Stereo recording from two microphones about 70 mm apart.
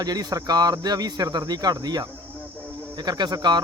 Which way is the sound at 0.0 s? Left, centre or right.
Right.